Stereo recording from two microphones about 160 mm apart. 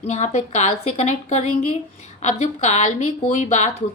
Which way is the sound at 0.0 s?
45° left (ahead or behind).